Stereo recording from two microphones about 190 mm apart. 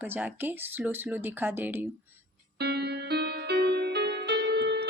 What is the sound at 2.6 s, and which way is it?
Music, 60° right (ahead or behind).